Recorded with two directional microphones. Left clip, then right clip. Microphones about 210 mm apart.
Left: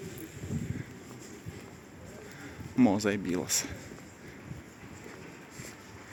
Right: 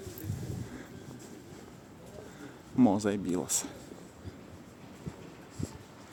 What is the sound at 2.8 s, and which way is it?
Speech, 5° right (ahead or behind).